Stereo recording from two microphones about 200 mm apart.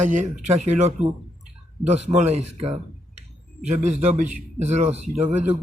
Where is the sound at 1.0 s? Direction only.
5° right (ahead or behind).